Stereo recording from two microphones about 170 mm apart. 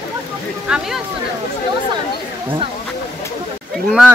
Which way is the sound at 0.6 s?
5° right (ahead or behind).